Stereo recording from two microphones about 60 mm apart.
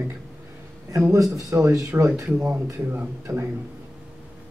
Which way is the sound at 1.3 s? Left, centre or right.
Right.